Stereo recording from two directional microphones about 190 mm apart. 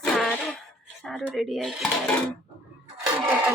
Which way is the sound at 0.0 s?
Centre (ahead or behind).